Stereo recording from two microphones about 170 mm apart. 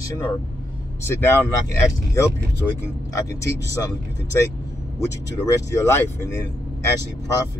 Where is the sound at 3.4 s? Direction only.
20° left (ahead or behind).